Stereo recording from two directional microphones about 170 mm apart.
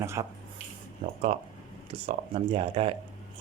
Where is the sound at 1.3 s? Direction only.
35° right (ahead or behind).